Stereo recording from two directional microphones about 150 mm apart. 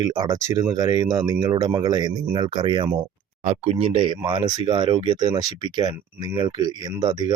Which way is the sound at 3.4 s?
45° right (ahead or behind).